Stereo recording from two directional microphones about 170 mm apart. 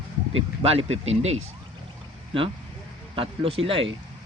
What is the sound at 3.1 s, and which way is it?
Speech, 35° right (ahead or behind).